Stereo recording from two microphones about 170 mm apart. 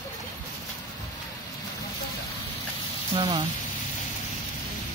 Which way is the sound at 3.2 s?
30° right (ahead or behind).